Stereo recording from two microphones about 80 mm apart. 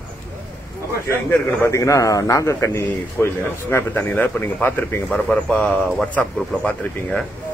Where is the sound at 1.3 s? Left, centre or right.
Left.